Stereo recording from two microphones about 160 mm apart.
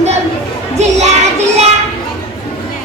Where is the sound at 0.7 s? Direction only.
45° right (ahead or behind).